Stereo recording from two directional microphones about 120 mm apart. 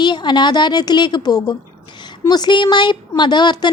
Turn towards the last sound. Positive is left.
turn(degrees=40)  # may be behind; listen again after turning